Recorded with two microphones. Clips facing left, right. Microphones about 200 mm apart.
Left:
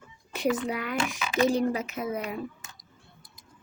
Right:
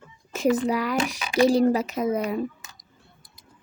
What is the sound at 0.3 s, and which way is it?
Speech, 40° right (ahead or behind).